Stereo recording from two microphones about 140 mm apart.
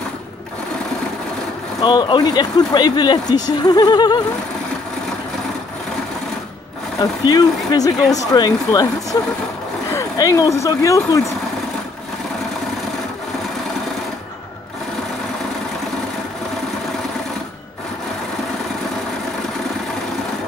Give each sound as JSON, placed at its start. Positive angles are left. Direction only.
{"t": 1.8, "sound": "speech", "side_deg": 30}
{"t": 7.0, "sound": "speech", "side_deg": 30}